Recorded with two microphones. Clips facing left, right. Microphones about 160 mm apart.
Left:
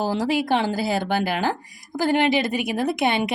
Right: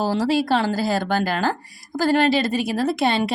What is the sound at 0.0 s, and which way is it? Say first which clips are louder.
A woman's voice: right 2 dB; 15° left (ahead or behind).